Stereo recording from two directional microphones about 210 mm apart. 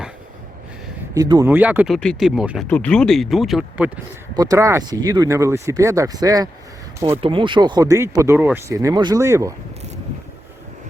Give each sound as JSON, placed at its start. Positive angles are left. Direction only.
{"t": 1.1, "sound": "speech", "side_deg": -15}
{"t": 4.4, "sound": "speech", "side_deg": -15}